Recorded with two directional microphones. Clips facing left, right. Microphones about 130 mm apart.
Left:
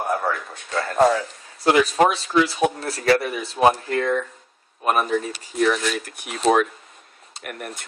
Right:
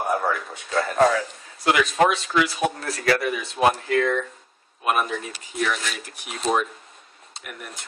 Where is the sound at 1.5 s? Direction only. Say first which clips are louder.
Left 3 dB; 30° left (ahead or behind).